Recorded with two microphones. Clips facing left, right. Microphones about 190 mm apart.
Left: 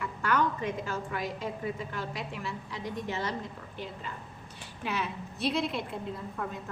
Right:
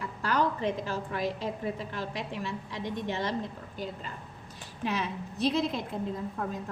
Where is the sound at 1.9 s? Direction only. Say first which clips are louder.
Right 1 dB; 35° right (ahead or behind).